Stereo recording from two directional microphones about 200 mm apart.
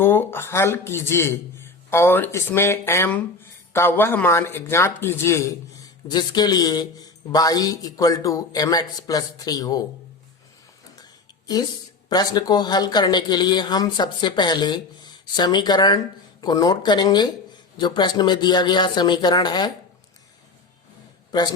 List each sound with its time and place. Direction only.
0.0 s speech: 10° left (ahead or behind)
12.0 s speech: 20° left (ahead or behind)